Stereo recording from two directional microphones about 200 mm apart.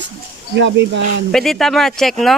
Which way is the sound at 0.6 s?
60° right (ahead or behind).